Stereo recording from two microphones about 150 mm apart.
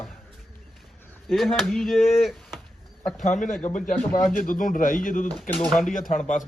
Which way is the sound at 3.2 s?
55° left (ahead or behind).